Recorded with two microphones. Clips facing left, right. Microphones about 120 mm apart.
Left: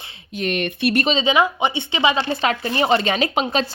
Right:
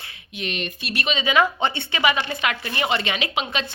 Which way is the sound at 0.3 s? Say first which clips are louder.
Left 7 dB; 50° left (ahead or behind).